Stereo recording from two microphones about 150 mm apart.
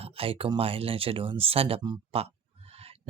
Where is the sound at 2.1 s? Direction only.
45° right (ahead or behind).